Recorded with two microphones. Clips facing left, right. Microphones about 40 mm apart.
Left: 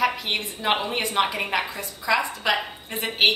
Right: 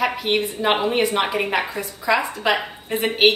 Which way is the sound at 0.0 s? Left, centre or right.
Centre.